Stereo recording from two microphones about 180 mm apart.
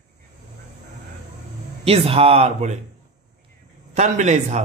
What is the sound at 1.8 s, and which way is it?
Speech, 35° right (ahead or behind).